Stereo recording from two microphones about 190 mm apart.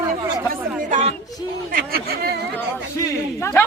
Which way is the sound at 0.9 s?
40° right (ahead or behind).